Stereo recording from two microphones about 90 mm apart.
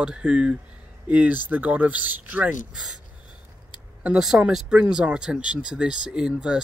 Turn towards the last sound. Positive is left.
turn(degrees=-10)  # may be behind; listen again after turning